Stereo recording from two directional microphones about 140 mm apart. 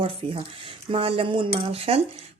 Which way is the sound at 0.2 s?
45° right (ahead or behind).